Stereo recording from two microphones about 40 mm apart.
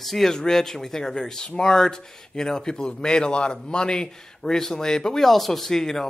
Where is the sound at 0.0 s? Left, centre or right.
Centre.